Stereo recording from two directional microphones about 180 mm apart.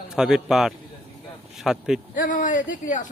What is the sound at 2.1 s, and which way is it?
Speech, 45° left (ahead or behind).